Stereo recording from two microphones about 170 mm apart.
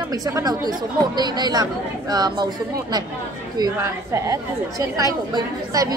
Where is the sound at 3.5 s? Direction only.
20° right (ahead or behind).